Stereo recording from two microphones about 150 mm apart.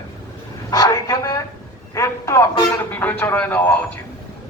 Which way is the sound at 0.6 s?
25° left (ahead or behind).